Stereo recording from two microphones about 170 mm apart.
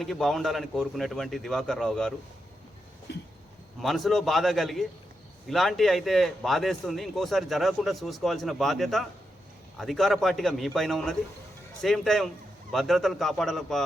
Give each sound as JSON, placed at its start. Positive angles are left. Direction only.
{"t": 0.0, "sound": "a man's voice", "side_deg": 0}
{"t": 3.1, "sound": "train", "side_deg": 80}
{"t": 3.8, "sound": "a man's voice", "side_deg": 0}